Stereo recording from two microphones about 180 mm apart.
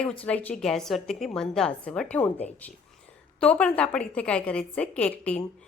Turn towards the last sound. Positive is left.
turn(degrees=5)  # may be behind; listen again after turning